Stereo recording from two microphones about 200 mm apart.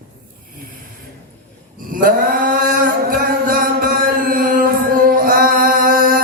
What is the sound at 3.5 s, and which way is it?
Chant, 45° right (ahead or behind).